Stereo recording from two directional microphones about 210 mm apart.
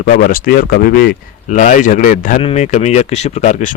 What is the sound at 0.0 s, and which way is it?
Speech, 40° left (ahead or behind).